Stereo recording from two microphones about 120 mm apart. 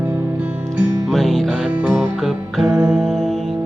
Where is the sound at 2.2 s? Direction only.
Centre (ahead or behind).